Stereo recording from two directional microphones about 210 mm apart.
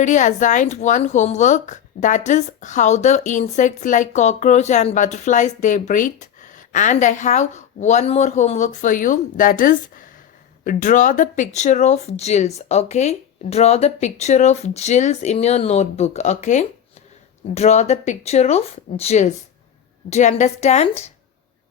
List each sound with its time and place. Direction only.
0.0 s a woman's voice: 35° left (ahead or behind)